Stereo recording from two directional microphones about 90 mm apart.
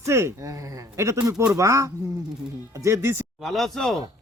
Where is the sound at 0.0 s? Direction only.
30° right (ahead or behind).